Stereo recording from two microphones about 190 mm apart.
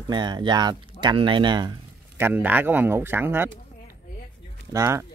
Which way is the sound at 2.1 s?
10° right (ahead or behind).